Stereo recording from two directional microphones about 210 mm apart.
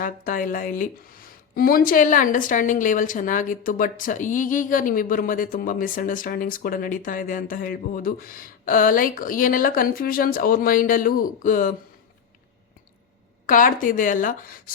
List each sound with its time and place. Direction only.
0.0 s speech: 40° left (ahead or behind)
13.5 s speech: 40° left (ahead or behind)